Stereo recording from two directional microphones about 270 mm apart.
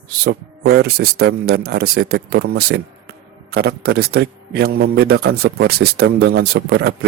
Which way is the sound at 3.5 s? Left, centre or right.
Right.